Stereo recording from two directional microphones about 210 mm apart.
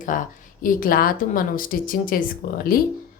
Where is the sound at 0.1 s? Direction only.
40° left (ahead or behind).